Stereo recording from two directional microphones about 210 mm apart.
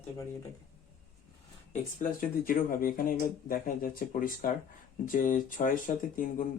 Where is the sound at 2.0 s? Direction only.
40° left (ahead or behind).